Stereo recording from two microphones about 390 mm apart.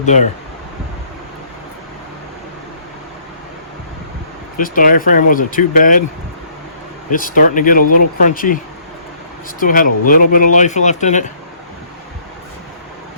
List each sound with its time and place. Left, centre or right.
0.0 s speech: centre
4.5 s speech: left
7.1 s speech: left
9.6 s speech: left